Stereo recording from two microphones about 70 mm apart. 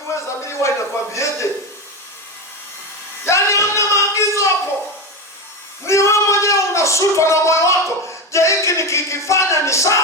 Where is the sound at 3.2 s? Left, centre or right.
Left.